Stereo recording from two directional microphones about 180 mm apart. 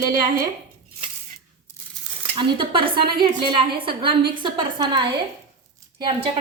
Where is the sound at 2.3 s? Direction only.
25° right (ahead or behind).